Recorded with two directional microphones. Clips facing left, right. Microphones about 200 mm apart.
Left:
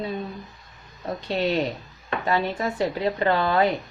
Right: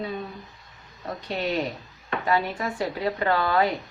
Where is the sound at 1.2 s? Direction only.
30° left (ahead or behind).